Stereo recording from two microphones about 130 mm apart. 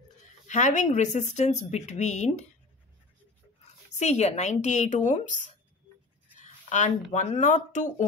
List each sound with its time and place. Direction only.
0.5 s speech: 70° left (ahead or behind)
3.9 s speech: 60° left (ahead or behind)